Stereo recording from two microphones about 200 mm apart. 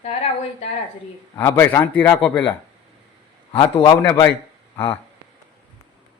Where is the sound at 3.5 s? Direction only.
25° left (ahead or behind).